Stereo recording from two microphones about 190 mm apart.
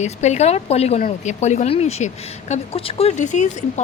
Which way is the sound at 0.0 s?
35° left (ahead or behind).